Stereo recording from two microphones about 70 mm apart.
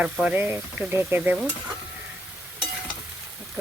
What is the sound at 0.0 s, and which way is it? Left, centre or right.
Speech, centre.